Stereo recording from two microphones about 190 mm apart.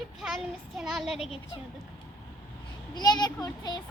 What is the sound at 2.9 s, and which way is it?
Speech, 20° left (ahead or behind).